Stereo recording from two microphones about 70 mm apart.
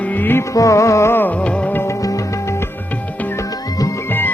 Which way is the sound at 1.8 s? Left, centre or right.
Left.